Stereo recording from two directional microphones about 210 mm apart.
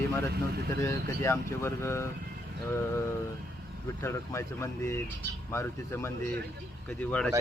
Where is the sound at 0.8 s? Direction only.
15° left (ahead or behind).